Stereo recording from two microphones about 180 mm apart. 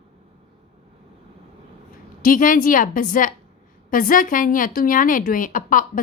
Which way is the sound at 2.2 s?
50° left (ahead or behind).